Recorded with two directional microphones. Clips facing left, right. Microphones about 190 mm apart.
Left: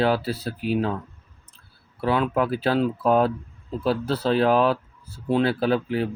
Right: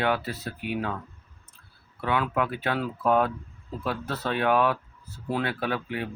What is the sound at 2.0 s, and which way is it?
Speech, 30° left (ahead or behind).